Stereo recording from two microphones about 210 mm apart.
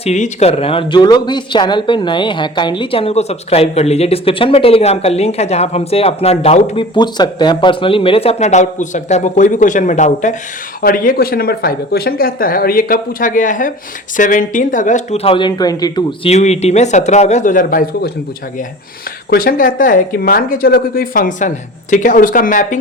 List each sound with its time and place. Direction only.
0.0 s speech: 30° left (ahead or behind)
16.3 s speech: 30° left (ahead or behind)
19.3 s speech: 45° left (ahead or behind)